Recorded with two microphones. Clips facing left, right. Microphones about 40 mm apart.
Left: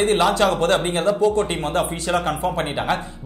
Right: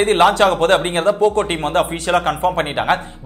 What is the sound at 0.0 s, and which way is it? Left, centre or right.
A man's voice, right.